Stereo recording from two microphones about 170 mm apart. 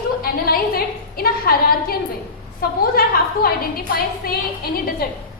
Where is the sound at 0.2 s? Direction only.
60° left (ahead or behind).